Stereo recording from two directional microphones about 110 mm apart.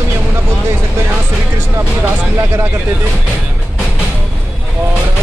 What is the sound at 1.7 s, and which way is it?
Speech, 20° right (ahead or behind).